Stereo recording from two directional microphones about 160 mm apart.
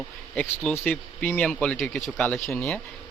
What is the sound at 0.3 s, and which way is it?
Speech, 10° left (ahead or behind).